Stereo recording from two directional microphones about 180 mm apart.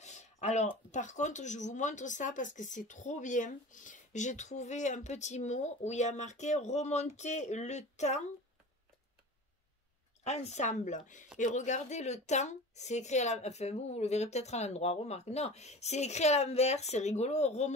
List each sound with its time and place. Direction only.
0.0 s a sound: 40° left (ahead or behind)
0.9 s speech: 40° left (ahead or behind)
10.2 s speech: 35° left (ahead or behind)